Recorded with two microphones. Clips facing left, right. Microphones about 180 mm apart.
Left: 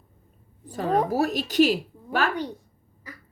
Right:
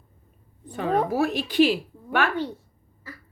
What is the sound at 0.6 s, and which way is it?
A woman's voice, 35° left (ahead or behind).